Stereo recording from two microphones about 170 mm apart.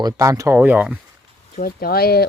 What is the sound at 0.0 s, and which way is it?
Speech, 20° right (ahead or behind).